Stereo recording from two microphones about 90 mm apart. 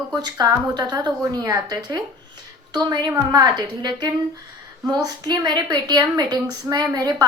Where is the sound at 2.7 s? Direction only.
50° right (ahead or behind).